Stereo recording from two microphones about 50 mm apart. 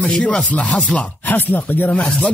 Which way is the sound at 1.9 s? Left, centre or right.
Left.